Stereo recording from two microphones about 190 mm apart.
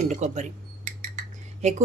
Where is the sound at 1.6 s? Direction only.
35° right (ahead or behind).